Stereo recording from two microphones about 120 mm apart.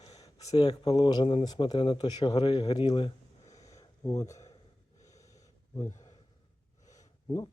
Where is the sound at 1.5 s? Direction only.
40° left (ahead or behind).